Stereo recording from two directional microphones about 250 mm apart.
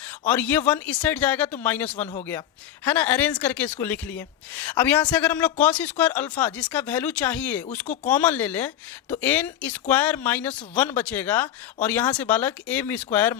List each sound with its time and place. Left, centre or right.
0.3 s speech: centre